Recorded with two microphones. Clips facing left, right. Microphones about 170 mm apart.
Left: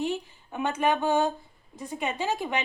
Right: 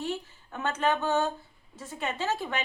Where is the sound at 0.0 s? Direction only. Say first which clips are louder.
Left 4 dB; 15° left (ahead or behind).